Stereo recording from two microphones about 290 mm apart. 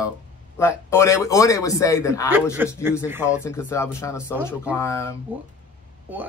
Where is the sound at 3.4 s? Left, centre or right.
Centre.